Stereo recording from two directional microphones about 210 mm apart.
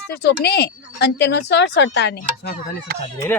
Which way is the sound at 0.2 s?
50° left (ahead or behind).